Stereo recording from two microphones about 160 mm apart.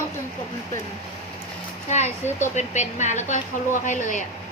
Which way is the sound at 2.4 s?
45° left (ahead or behind).